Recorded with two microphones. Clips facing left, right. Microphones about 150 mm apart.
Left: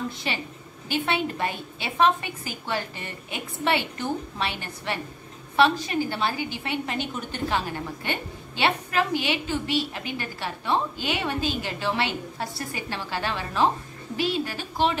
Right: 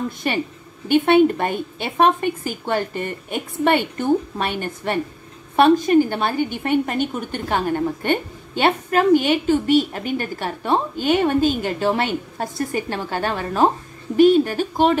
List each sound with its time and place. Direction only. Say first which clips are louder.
0.2 s a woman's voice: right 8 dB; 50° right (ahead or behind)